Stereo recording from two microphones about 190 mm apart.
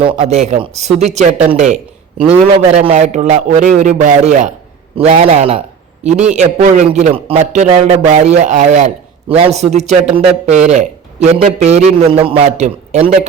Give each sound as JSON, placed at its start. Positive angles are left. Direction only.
{"t": 0.0, "sound": "a man's voice", "side_deg": -30}